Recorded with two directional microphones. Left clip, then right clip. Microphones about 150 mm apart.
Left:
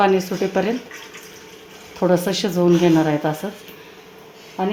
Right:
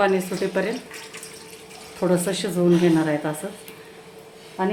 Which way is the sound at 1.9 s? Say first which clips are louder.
Left 4 dB; 45° left (ahead or behind).